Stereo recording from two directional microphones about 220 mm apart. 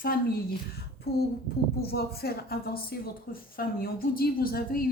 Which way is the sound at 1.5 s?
45° left (ahead or behind).